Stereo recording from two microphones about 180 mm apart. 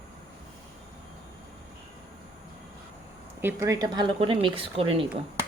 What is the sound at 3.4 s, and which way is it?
A woman's voice, 15° right (ahead or behind).